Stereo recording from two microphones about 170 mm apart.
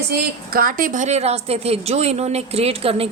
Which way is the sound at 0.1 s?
60° right (ahead or behind).